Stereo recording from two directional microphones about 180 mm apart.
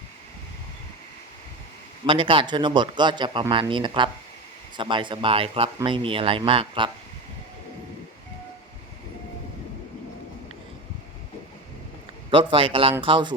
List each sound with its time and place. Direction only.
2.0 s speech: 30° right (ahead or behind)
12.3 s speech: 30° right (ahead or behind)